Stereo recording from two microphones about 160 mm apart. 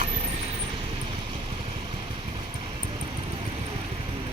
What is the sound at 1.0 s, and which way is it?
Vehicle, 35° right (ahead or behind).